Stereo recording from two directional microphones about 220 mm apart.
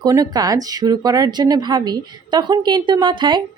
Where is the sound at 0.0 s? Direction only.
15° right (ahead or behind).